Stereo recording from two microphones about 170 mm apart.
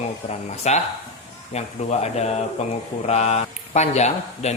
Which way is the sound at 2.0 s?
40° left (ahead or behind).